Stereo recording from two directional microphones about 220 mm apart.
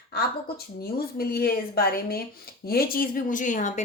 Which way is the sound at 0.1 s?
45° left (ahead or behind).